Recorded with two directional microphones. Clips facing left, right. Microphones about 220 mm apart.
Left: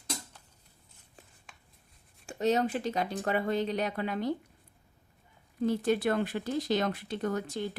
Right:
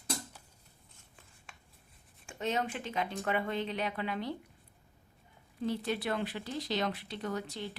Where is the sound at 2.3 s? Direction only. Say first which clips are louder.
Left 7 dB; 40° left (ahead or behind).